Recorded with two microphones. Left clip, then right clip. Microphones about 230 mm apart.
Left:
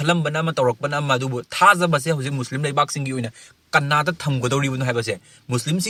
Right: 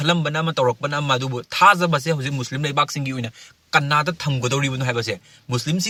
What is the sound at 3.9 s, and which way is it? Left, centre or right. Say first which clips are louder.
Speech: even; right.